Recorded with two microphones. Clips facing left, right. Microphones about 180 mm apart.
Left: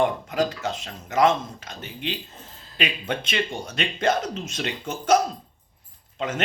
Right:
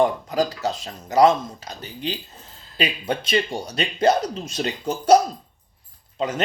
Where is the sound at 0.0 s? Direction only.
35° right (ahead or behind).